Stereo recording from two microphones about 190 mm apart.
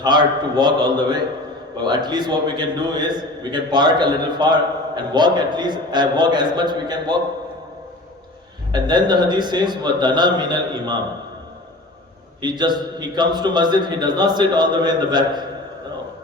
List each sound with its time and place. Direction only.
0.0 s a man's voice: 25° right (ahead or behind)
8.7 s a man's voice: 25° right (ahead or behind)
12.4 s a man's voice: 20° right (ahead or behind)